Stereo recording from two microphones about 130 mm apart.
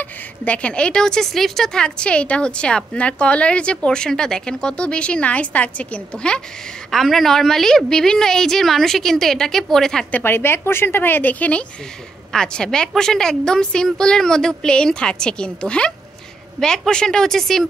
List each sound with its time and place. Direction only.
0.0 s a woman's voice: 10° left (ahead or behind)
10.2 s a woman's voice: 15° left (ahead or behind)